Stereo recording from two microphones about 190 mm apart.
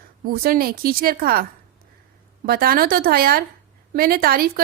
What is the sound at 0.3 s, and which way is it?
A woman's voice, 50° right (ahead or behind).